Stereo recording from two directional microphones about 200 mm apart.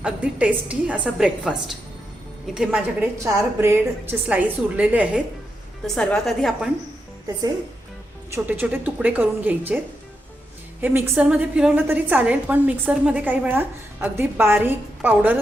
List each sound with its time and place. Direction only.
0.0 s a woman's voice: 5° right (ahead or behind)
8.3 s a woman's voice: 10° right (ahead or behind)